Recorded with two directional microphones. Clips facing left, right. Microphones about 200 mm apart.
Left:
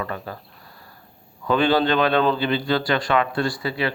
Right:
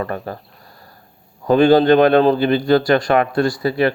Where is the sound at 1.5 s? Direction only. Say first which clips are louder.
Right 8 dB; 45° right (ahead or behind).